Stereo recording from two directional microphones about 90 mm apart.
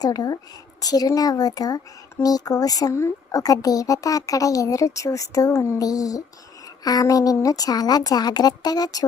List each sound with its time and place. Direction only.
0.0 s speech: 45° left (ahead or behind)
2.9 s speech: 30° left (ahead or behind)
3.4 s speech: 45° left (ahead or behind)